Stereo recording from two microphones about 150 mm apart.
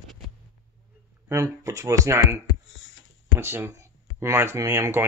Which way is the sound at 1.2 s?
20° right (ahead or behind).